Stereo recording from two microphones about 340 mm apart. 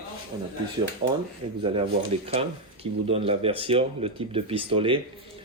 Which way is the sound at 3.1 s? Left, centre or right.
Centre.